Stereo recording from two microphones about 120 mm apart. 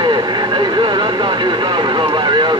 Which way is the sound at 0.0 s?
40° right (ahead or behind).